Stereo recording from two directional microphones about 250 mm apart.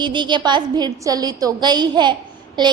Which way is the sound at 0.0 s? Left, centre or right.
Centre.